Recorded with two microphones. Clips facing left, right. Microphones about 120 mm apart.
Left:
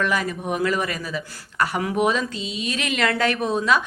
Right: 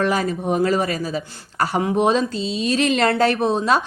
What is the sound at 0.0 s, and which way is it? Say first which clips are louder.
Speech: right 4 dB; 35° right (ahead or behind).